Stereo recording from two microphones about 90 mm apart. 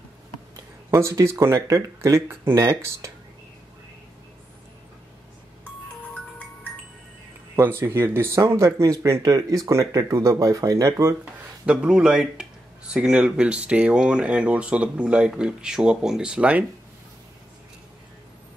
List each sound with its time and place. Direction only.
0.8 s speech: 35° right (ahead or behind)
6.1 s music: 15° left (ahead or behind)
7.5 s speech: 25° right (ahead or behind)
11.6 s speech: 10° right (ahead or behind)